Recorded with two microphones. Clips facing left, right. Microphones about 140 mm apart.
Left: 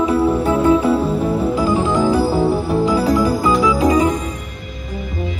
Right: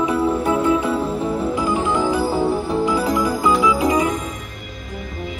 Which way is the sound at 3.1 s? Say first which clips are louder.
Left 3 dB; 30° left (ahead or behind).